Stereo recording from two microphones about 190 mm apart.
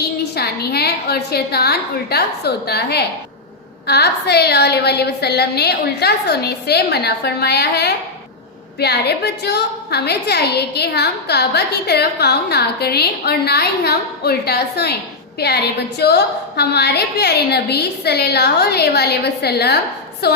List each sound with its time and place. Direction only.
0.3 s a woman's voice: 60° left (ahead or behind)